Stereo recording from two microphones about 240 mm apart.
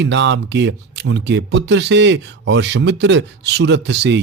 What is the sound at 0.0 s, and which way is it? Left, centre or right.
Speech, right.